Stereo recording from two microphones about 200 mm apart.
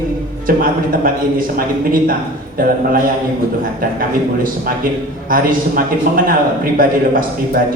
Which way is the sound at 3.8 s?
45° right (ahead or behind).